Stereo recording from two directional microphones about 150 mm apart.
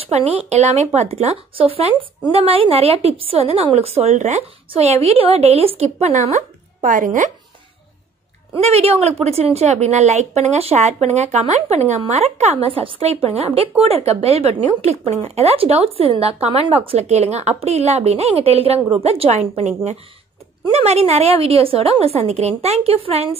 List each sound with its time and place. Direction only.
0.1 s speech: 45° right (ahead or behind)
8.5 s speech: 45° right (ahead or behind)